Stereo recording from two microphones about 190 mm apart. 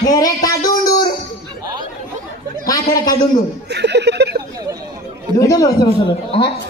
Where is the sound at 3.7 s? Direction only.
60° right (ahead or behind).